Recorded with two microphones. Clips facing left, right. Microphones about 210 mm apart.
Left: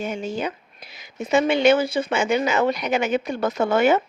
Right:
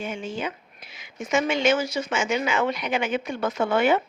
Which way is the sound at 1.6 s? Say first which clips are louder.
Left 5 dB; 60° left (ahead or behind).